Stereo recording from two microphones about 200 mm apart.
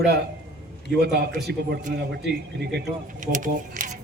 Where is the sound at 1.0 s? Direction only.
55° right (ahead or behind).